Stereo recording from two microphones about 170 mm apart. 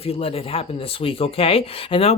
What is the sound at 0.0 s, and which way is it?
Speech, 35° left (ahead or behind).